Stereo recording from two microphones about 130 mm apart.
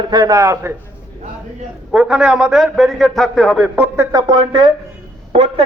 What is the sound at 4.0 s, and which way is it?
Speech, 30° right (ahead or behind).